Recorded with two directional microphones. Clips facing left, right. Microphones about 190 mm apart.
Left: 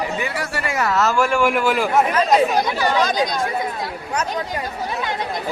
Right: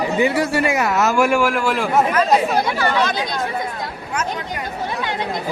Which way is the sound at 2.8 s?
15° left (ahead or behind).